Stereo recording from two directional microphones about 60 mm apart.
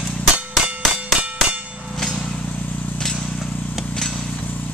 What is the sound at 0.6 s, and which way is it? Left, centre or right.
Clang, right.